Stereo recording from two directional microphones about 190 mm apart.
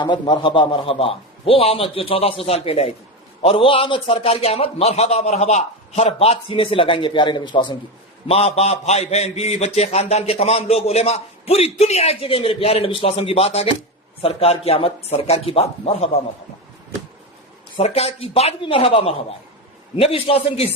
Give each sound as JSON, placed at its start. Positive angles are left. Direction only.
{"t": 0.0, "sound": "a man's voice", "side_deg": 25}
{"t": 17.7, "sound": "a man's voice", "side_deg": 35}